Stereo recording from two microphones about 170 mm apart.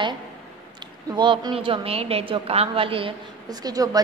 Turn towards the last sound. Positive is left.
turn(degrees=-20)  # may be behind; listen again after turning